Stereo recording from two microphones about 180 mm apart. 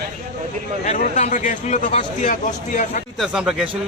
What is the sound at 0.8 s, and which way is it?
A man's voice, 40° left (ahead or behind).